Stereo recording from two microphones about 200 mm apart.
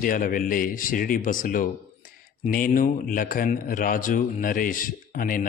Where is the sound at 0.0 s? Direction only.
45° left (ahead or behind).